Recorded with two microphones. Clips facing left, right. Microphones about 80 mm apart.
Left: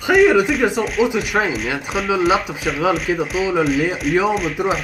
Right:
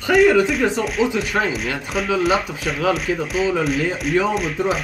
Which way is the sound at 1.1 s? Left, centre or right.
Centre.